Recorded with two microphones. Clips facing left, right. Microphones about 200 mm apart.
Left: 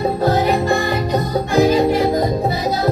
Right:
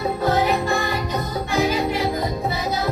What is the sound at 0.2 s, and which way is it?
Music, 40° left (ahead or behind).